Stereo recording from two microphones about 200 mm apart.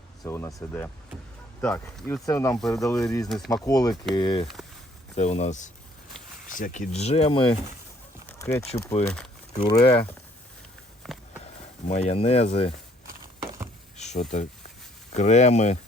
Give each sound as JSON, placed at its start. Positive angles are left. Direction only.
{"t": 0.3, "sound": "speech", "side_deg": 15}
{"t": 3.2, "sound": "speech", "side_deg": 0}
{"t": 3.5, "sound": "speech", "side_deg": 20}
{"t": 5.1, "sound": "speech", "side_deg": 35}
{"t": 8.3, "sound": "a sound", "side_deg": 10}
{"t": 8.7, "sound": "speech", "side_deg": 30}
{"t": 11.1, "sound": "a sound", "side_deg": 0}
{"t": 11.9, "sound": "speech", "side_deg": 35}
{"t": 13.9, "sound": "a sound", "side_deg": 35}
{"t": 15.1, "sound": "speech", "side_deg": 35}